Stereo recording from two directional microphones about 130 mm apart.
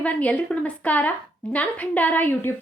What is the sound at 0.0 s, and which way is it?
A woman's voice, 10° left (ahead or behind).